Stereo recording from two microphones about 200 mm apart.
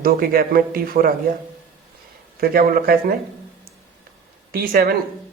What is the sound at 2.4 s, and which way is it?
Speech, 50° right (ahead or behind).